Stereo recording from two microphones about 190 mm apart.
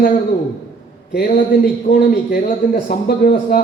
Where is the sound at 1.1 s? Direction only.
50° left (ahead or behind).